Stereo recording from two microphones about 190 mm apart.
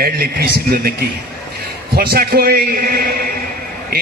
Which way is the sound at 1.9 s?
50° right (ahead or behind).